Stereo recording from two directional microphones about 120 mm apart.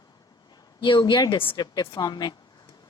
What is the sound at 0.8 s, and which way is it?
Speech, 40° left (ahead or behind).